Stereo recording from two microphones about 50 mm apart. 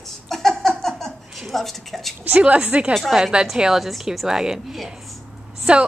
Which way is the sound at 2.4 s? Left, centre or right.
Right.